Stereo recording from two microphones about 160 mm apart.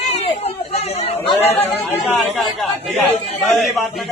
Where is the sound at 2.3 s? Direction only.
Centre (ahead or behind).